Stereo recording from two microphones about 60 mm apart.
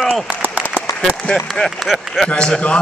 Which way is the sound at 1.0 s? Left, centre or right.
Centre.